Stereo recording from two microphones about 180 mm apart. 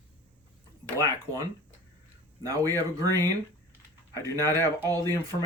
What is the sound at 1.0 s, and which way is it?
Speech, 20° right (ahead or behind).